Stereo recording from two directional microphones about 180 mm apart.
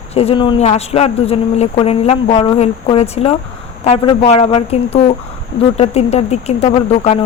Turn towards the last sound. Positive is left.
turn(degrees=35)  # may be behind; listen again after turning